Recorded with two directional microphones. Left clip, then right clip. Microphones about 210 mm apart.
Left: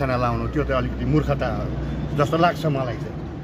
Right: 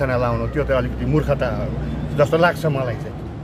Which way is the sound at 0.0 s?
Centre (ahead or behind).